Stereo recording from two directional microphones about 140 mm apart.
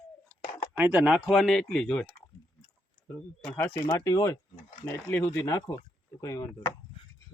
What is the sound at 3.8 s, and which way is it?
Speech, 25° left (ahead or behind).